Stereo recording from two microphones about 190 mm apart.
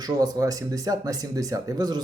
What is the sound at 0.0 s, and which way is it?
Speech, 20° right (ahead or behind).